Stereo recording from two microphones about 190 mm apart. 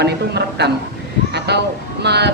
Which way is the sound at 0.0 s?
60° right (ahead or behind).